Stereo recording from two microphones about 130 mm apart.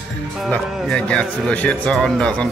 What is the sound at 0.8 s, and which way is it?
Speech, 5° left (ahead or behind).